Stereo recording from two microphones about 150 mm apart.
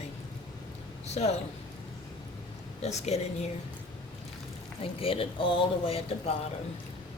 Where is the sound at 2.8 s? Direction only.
45° left (ahead or behind).